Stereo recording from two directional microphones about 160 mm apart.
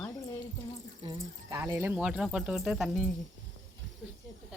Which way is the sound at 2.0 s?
5° right (ahead or behind).